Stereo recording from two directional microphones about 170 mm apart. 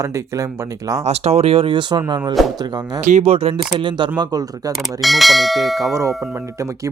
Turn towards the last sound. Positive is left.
turn(degrees=0)  # may be behind; listen again after turning